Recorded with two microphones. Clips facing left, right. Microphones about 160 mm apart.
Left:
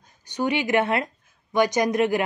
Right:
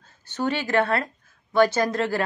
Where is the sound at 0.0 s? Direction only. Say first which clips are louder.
Left 1 dB; 15° left (ahead or behind).